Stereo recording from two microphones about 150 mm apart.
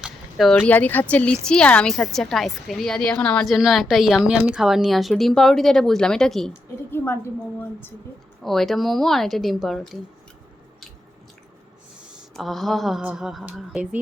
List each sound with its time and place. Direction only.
0.0 s a sound: centre (ahead or behind)
0.5 s a woman's voice: 10° left (ahead or behind)
6.5 s a woman's voice: 15° left (ahead or behind)
8.4 s a woman's voice: centre (ahead or behind)
12.3 s a woman's voice: centre (ahead or behind)